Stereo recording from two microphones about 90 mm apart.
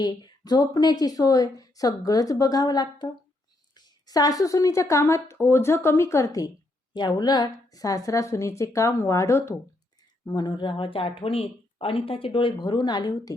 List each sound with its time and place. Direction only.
0.0 s a woman's voice: 50° left (ahead or behind)
6.9 s speech: 55° left (ahead or behind); by 9.6 s 35° left (ahead or behind)
10.2 s speech: 55° left (ahead or behind)